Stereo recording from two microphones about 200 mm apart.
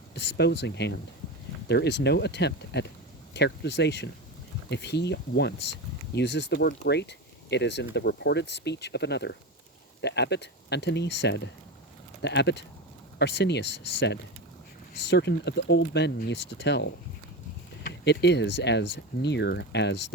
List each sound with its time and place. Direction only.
0.1 s speech: 55° left (ahead or behind)